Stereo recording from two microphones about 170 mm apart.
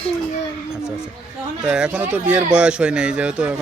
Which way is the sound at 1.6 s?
5° right (ahead or behind).